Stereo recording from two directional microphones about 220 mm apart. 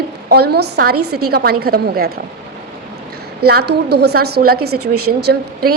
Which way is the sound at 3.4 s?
45° right (ahead or behind).